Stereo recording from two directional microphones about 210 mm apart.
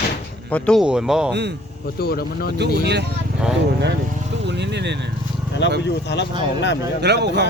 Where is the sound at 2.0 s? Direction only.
45° left (ahead or behind).